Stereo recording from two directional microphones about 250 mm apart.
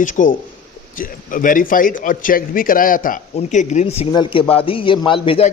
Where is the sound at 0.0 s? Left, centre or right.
Left.